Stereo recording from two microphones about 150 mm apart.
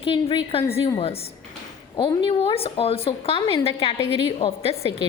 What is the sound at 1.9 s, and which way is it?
A woman's voice, 30° left (ahead or behind).